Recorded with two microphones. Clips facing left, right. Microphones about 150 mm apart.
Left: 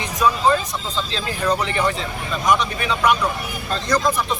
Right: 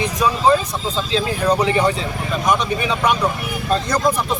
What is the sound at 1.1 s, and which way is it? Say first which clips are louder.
Speech: right 5 dB; 15° right (ahead or behind).